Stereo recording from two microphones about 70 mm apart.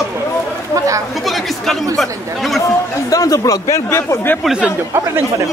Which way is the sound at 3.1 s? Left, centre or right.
Left.